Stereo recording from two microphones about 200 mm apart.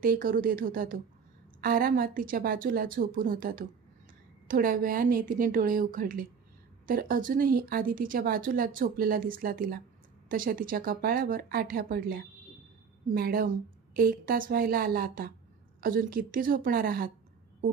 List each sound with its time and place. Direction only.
0.0 s speech: 45° right (ahead or behind)